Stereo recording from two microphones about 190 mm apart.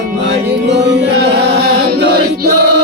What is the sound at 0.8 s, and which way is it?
Chant, 65° right (ahead or behind).